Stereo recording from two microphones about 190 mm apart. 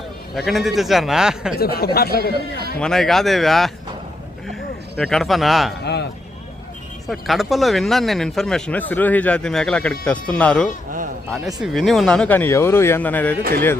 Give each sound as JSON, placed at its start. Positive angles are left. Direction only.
{"t": 0.3, "sound": "speech", "side_deg": 0}
{"t": 1.5, "sound": "speech", "side_deg": 55}
{"t": 2.3, "sound": "a man's voice", "side_deg": -55}
{"t": 2.7, "sound": "speech", "side_deg": 5}
{"t": 5.8, "sound": "a man's voice", "side_deg": 60}
{"t": 7.1, "sound": "speech", "side_deg": 0}